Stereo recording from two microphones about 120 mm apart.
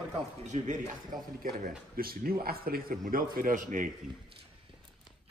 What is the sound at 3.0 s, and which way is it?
Speech, 90° right.